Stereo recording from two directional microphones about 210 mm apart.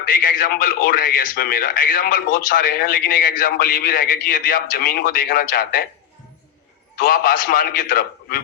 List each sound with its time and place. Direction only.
0.0 s a man's voice: 40° left (ahead or behind)
6.9 s a man's voice: 40° left (ahead or behind)